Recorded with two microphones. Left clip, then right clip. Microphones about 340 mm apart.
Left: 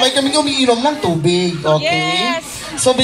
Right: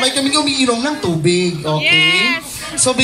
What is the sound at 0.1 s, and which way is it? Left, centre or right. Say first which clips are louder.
Speech: left 1 dB; left.